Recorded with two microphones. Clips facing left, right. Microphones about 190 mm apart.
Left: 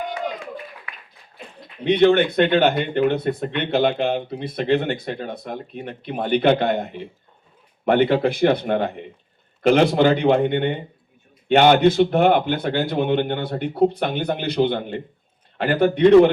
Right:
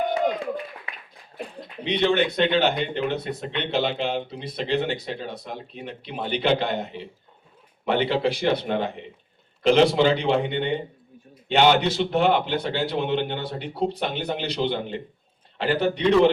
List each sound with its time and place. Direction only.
1.8 s speech: 55° left (ahead or behind)